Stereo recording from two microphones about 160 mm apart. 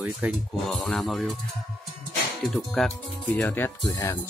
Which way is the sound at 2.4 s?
Centre (ahead or behind).